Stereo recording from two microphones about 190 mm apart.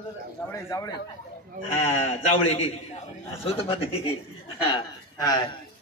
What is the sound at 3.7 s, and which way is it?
Speech, 30° left (ahead or behind).